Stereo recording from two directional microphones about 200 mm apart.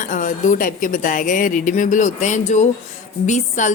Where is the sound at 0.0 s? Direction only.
40° left (ahead or behind).